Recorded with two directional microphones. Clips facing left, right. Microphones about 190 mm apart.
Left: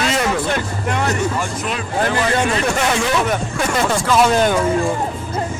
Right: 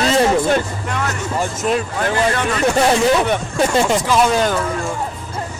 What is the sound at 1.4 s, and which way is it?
Speech, 40° right (ahead or behind).